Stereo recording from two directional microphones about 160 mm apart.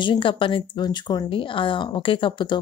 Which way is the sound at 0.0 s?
30° left (ahead or behind).